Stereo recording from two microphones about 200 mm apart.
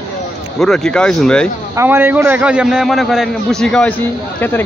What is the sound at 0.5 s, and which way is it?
Speech, centre (ahead or behind).